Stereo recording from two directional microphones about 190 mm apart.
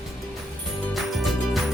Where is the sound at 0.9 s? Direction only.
Centre (ahead or behind).